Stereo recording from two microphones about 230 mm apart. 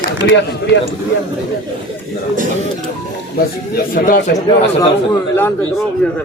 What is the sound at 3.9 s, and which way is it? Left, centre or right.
Speech, left.